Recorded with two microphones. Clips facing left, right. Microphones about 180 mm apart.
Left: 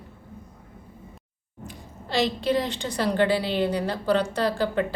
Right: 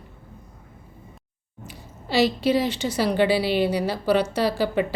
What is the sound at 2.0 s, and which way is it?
A woman's voice, 5° right (ahead or behind).